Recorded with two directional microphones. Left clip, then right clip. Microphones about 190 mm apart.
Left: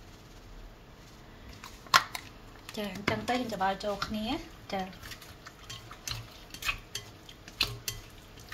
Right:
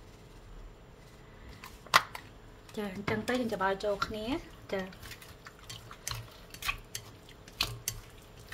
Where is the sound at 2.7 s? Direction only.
10° right (ahead or behind).